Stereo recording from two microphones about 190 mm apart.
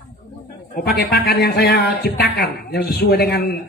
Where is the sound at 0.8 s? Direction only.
55° left (ahead or behind).